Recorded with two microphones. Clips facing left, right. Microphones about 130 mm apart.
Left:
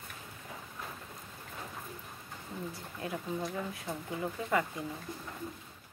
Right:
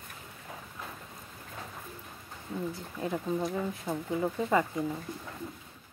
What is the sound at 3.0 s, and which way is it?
Speech, 30° right (ahead or behind).